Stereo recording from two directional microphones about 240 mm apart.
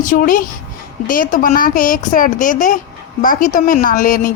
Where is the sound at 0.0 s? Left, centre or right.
Left.